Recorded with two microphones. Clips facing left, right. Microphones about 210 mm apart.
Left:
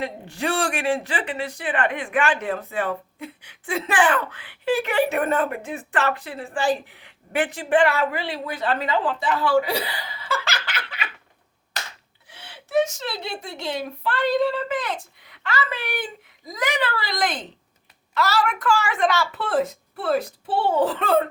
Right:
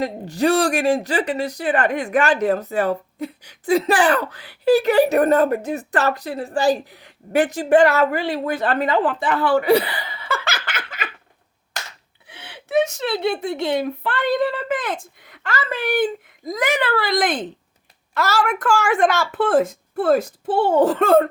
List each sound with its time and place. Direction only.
0.0 s speech: 40° right (ahead or behind)
11.8 s a sound: 50° right (ahead or behind)
12.3 s a woman's voice: 60° right (ahead or behind); by 21.2 s 45° right (ahead or behind)